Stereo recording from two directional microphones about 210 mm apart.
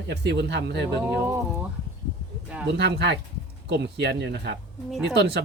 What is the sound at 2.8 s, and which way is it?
Speech, 55° right (ahead or behind).